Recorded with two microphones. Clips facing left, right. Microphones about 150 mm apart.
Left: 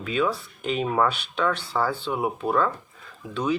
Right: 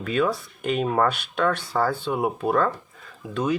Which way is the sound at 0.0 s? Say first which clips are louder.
Right 2 dB; 50° right (ahead or behind).